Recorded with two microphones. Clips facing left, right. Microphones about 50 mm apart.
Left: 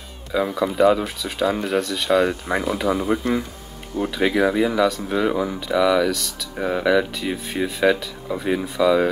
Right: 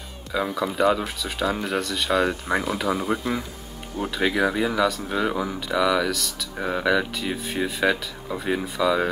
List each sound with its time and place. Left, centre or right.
0.3 s speech: centre